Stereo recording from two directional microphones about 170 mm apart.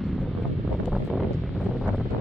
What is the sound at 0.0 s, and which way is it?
Wind noise, centre (ahead or behind).